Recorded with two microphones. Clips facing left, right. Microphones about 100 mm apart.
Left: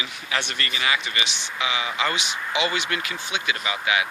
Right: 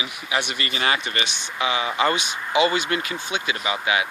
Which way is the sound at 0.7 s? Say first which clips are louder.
Right 2 dB; 40° right (ahead or behind).